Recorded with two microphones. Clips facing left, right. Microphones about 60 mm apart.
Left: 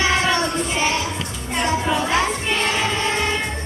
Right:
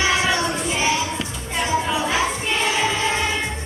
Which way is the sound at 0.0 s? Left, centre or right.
Centre.